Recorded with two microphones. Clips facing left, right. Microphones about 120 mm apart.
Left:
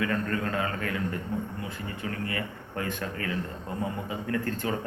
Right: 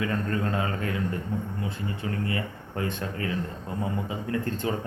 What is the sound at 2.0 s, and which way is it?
A man's voice, 25° right (ahead or behind).